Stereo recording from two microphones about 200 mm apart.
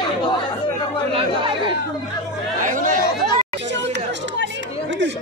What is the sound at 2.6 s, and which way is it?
Chatter, 40° right (ahead or behind).